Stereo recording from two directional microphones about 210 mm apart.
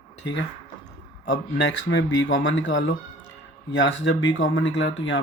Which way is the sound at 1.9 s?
60° left (ahead or behind).